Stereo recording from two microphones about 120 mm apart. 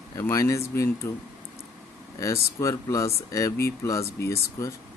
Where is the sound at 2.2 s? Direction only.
25° left (ahead or behind).